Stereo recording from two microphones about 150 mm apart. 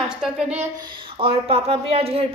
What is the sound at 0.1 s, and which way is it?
Speech, 5° right (ahead or behind).